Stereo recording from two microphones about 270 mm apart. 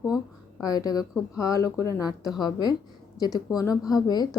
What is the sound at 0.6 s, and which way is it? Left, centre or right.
Speech, centre.